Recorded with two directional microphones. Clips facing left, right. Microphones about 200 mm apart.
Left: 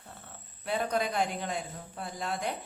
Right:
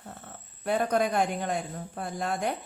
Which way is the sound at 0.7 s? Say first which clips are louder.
Right 5 dB; 50° right (ahead or behind).